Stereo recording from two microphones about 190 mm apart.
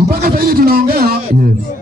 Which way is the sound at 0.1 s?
50° right (ahead or behind).